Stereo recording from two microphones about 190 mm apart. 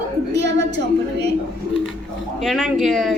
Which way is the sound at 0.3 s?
65° right (ahead or behind).